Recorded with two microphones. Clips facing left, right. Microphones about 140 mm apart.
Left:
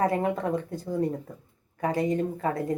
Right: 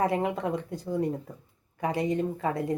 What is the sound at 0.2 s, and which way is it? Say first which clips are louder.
Speech: left 2 dB; 45° left (ahead or behind).